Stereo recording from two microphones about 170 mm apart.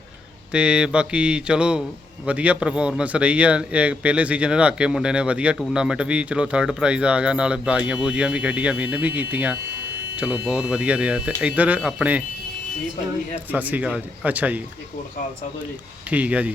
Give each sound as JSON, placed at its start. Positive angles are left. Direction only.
{"t": 0.5, "sound": "mantra", "side_deg": -5}
{"t": 2.2, "sound": "speech", "side_deg": -10}
{"t": 13.5, "sound": "speech", "side_deg": -10}
{"t": 16.0, "sound": "speech", "side_deg": -10}